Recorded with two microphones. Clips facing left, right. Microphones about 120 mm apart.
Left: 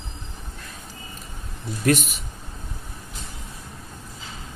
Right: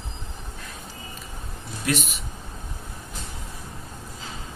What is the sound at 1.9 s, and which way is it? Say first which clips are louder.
Speech: left 6 dB; 50° left (ahead or behind).